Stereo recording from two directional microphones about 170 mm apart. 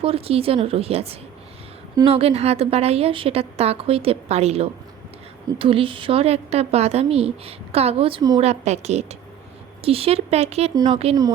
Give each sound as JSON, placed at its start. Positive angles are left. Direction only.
{"t": 0.0, "sound": "a woman's voice", "side_deg": -35}
{"t": 8.4, "sound": "a woman's voice", "side_deg": -40}